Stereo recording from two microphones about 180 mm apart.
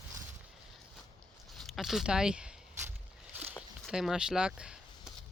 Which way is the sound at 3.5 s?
Centre (ahead or behind).